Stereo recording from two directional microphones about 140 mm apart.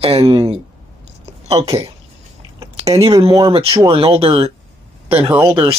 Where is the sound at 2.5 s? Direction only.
25° right (ahead or behind).